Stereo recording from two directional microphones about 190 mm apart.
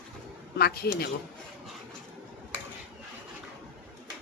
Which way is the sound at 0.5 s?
55° left (ahead or behind).